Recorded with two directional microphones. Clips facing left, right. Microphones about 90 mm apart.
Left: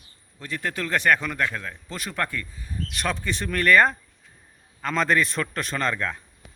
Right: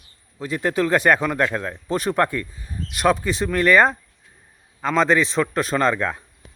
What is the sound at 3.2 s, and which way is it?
Speech, 5° right (ahead or behind).